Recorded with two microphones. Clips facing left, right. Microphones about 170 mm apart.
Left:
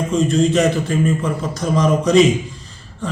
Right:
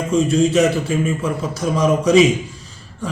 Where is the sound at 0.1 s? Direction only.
5° right (ahead or behind).